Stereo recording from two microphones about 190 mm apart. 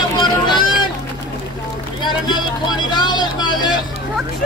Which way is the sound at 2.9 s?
25° left (ahead or behind).